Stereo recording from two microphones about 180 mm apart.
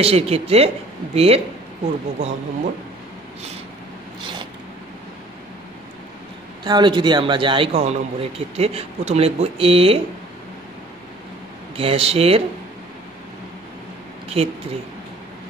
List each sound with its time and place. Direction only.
0.0 s a man's voice: 35° right (ahead or behind)
6.6 s a man's voice: 25° right (ahead or behind)
11.7 s a man's voice: 30° right (ahead or behind)
14.3 s a man's voice: 35° right (ahead or behind)